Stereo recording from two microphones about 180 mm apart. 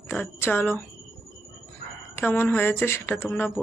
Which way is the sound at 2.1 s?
10° left (ahead or behind).